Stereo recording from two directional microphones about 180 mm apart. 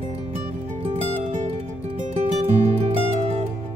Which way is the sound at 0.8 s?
40° right (ahead or behind).